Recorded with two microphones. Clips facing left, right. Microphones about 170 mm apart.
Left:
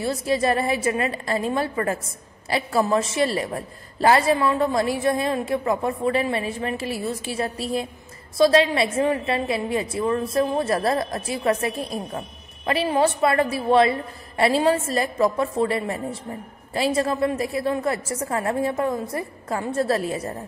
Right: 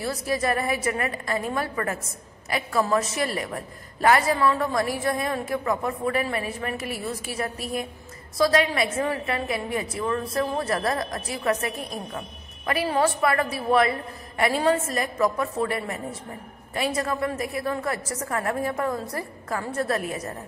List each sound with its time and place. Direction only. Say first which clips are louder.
0.0 s a woman's voice: left 4 dB; 25° left (ahead or behind)